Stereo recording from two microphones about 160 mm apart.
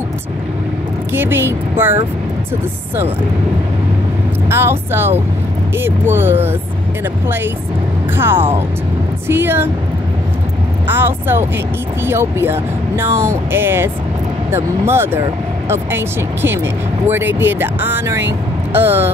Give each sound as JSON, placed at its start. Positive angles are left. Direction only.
{"t": 1.1, "sound": "speech", "side_deg": -15}
{"t": 4.5, "sound": "speech", "side_deg": -15}
{"t": 8.2, "sound": "speech", "side_deg": -15}
{"t": 10.9, "sound": "speech", "side_deg": -15}
{"t": 17.0, "sound": "speech", "side_deg": -15}